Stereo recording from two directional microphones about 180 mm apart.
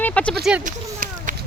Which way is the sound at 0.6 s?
45° right (ahead or behind).